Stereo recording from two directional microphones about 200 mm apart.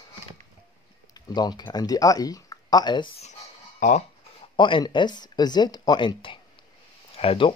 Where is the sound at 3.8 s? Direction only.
40° left (ahead or behind).